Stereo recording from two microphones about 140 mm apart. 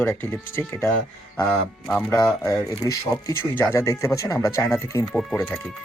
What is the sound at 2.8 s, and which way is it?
Speech, 25° left (ahead or behind).